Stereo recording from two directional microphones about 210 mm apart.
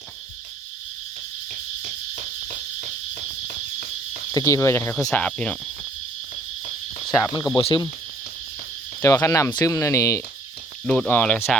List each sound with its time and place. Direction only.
4.3 s speech: 15° left (ahead or behind)
7.5 s cricket: 20° left (ahead or behind)
9.0 s speech: 15° left (ahead or behind)